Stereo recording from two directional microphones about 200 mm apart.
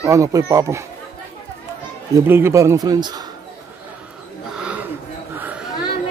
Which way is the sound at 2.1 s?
10° right (ahead or behind).